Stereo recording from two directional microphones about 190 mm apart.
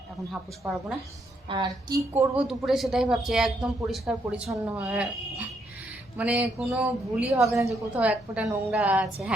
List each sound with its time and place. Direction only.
0.6 s speech: 5° right (ahead or behind)
1.5 s a woman's voice: 25° right (ahead or behind)
2.3 s a woman's voice: 5° right (ahead or behind)